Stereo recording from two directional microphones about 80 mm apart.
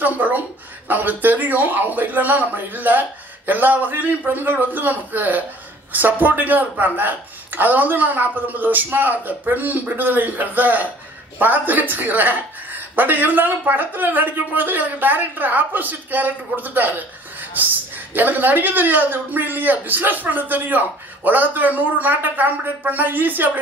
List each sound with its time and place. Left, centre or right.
0.0 s a sound: right
0.8 s speech: right
18.1 s speech: right